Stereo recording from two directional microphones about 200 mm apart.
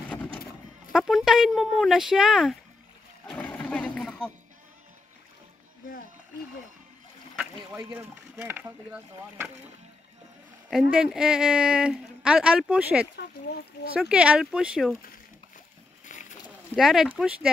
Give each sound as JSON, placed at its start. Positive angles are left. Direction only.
{"t": 0.1, "sound": "fowl", "side_deg": 5}
{"t": 0.9, "sound": "speech", "side_deg": 0}
{"t": 3.3, "sound": "roaring cats", "side_deg": 5}
{"t": 7.3, "sound": "speech", "side_deg": -10}
{"t": 10.7, "sound": "speech", "side_deg": -5}
{"t": 16.1, "sound": "rowboat", "side_deg": 40}
{"t": 16.4, "sound": "a sound", "side_deg": 0}
{"t": 17.2, "sound": "speech", "side_deg": -5}